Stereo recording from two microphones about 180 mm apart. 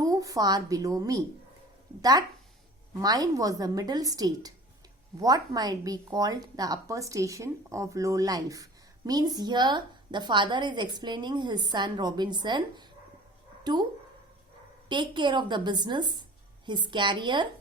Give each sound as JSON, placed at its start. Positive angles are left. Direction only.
{"t": 0.0, "sound": "a woman's voice", "side_deg": -20}
{"t": 14.8, "sound": "a woman's voice", "side_deg": -25}